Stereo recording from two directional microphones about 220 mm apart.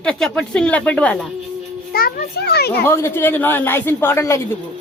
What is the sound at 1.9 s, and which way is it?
Speech, 45° left (ahead or behind).